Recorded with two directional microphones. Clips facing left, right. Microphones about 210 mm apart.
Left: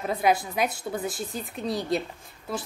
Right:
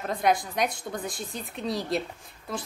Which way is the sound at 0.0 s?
5° left (ahead or behind).